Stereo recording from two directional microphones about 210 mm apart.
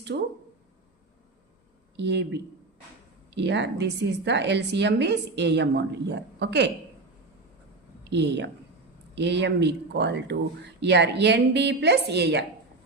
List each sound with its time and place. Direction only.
0.1 s speech: 50° right (ahead or behind)
2.0 s a woman's voice: 55° right (ahead or behind)
8.1 s a woman's voice: 55° right (ahead or behind)